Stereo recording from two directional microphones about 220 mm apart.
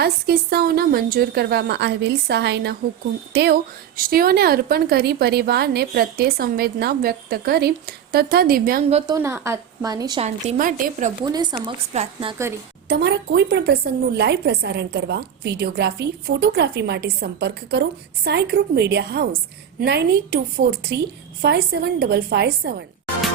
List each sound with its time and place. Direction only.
0.0 s a woman's voice: 45° right (ahead or behind)
9.0 s a woman's voice: 15° right (ahead or behind)
10.2 s speech: 35° right (ahead or behind)
11.2 s a woman's voice: 20° right (ahead or behind)
12.9 s a woman's voice: 50° right (ahead or behind)